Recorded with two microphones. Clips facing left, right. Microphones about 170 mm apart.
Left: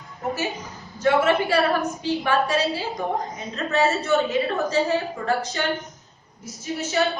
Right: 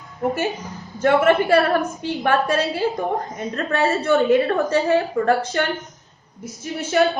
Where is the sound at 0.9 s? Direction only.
55° right (ahead or behind).